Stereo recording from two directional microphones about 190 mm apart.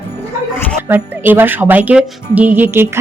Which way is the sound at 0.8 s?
10° right (ahead or behind).